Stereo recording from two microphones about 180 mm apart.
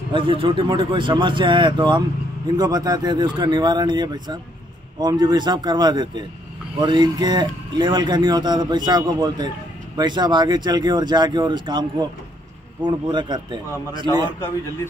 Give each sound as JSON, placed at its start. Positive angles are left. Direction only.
{"t": 0.1, "sound": "a man's voice", "side_deg": -30}